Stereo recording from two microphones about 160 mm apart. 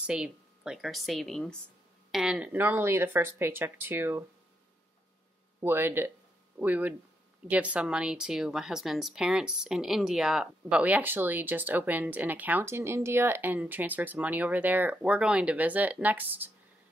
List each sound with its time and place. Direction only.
0.0 s a woman's voice: 5° right (ahead or behind)
5.6 s a woman's voice: 15° right (ahead or behind)